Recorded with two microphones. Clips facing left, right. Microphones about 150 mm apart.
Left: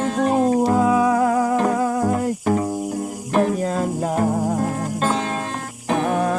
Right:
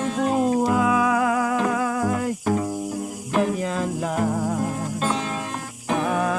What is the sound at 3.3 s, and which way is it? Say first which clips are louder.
Music: left 3 dB; 40° left (ahead or behind).